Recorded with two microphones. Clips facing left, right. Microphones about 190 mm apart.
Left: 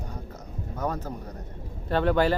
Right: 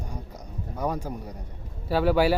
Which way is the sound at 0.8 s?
10° right (ahead or behind).